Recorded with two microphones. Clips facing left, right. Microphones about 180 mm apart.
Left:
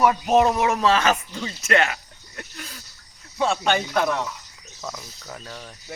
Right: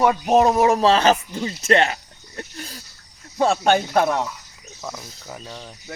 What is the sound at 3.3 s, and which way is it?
Speech, 50° right (ahead or behind).